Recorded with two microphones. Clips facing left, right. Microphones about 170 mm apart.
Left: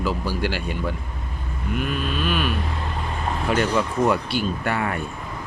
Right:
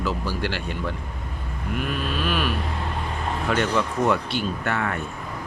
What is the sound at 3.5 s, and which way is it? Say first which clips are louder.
Speech: left 2 dB; 10° left (ahead or behind).